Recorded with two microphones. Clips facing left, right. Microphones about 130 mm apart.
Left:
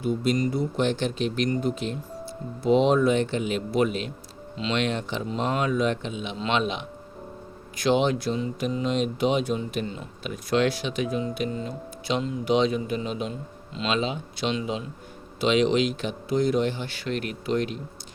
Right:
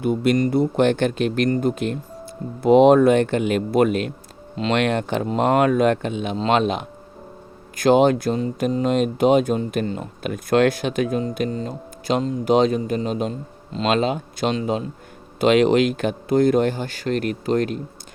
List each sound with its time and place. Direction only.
0.0 s speech: 65° right (ahead or behind)
6.3 s speech: 40° right (ahead or behind)